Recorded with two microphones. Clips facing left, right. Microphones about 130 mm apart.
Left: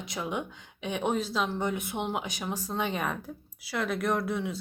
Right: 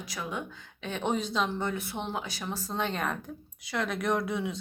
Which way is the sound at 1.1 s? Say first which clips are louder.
Right 3 dB; 5° left (ahead or behind).